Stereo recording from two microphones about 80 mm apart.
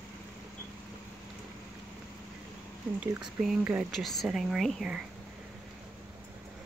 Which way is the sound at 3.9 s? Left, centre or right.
Centre.